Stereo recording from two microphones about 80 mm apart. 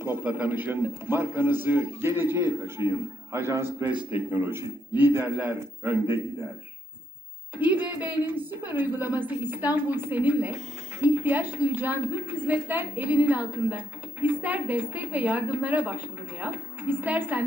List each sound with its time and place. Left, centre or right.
0.3 s a woman's voice: centre
7.5 s a woman's voice: right